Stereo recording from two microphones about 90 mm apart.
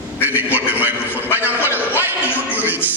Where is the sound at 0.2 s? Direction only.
20° right (ahead or behind).